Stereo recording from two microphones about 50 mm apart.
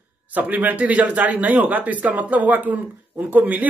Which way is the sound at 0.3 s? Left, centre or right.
Right.